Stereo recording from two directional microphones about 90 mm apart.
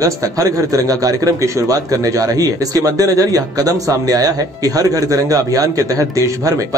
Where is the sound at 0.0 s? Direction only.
40° right (ahead or behind).